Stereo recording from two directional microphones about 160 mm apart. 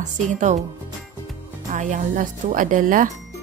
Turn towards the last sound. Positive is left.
turn(degrees=-55)  # may be behind; listen again after turning